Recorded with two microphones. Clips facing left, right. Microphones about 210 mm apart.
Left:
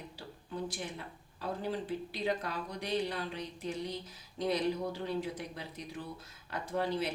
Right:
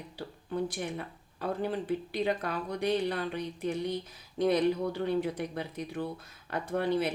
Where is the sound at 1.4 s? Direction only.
60° right (ahead or behind).